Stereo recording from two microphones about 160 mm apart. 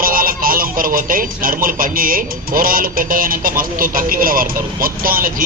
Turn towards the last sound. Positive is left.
turn(degrees=-65)  # may be behind; listen again after turning